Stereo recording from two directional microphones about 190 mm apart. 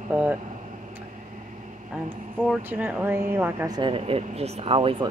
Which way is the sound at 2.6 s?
10° right (ahead or behind).